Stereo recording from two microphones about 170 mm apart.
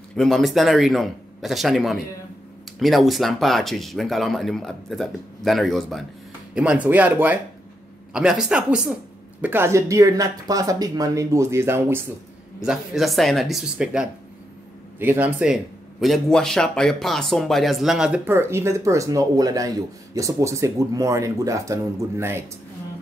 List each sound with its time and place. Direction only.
0.1 s speech: centre (ahead or behind); by 12.1 s 15° right (ahead or behind)
12.5 s speech: 5° right (ahead or behind)